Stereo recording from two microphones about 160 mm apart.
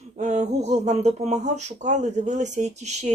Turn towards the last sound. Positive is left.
turn(degrees=-45)  # may be behind; listen again after turning